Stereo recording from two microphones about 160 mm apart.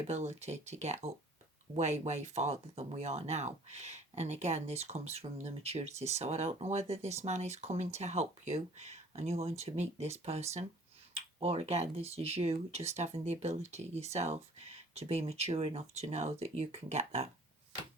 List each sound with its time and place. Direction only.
0.1 s speech: 45° right (ahead or behind)